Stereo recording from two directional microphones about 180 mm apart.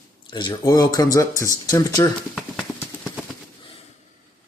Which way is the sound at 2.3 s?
5° left (ahead or behind).